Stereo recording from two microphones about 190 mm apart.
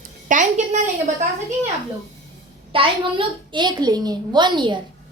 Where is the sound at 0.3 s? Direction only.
40° right (ahead or behind).